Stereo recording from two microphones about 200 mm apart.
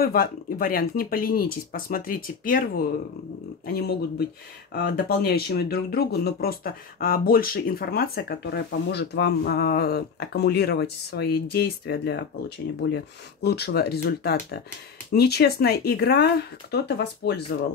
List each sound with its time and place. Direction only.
0.0 s speech: 50° left (ahead or behind)